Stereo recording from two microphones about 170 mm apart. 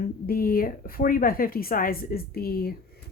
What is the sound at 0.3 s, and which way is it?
Speech, 55° left (ahead or behind).